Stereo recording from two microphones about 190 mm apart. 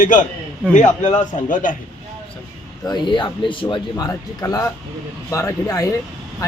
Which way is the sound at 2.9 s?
25° left (ahead or behind).